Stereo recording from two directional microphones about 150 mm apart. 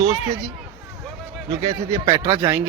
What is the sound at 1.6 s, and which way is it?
Speech, 20° right (ahead or behind).